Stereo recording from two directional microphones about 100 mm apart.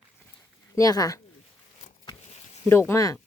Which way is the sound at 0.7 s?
35° left (ahead or behind).